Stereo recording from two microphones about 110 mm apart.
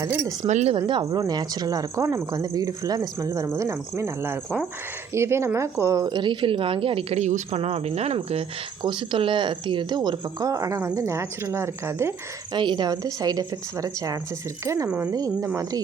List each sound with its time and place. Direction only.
0.4 s speech: 90° right
0.7 s speech: 50° right (ahead or behind); by 6.1 s 30° right (ahead or behind)
6.1 s speech: 45° right (ahead or behind); by 8.4 s 65° right (ahead or behind)
8.8 s speech: 45° right (ahead or behind); by 12.1 s 25° right (ahead or behind)
12.5 s speech: 45° right (ahead or behind); by 14.8 s 25° right (ahead or behind)
14.8 s speech: 10° right (ahead or behind)
15.1 s speech: 35° right (ahead or behind)